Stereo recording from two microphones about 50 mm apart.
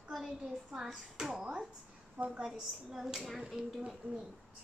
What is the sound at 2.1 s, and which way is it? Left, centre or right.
Speech, right.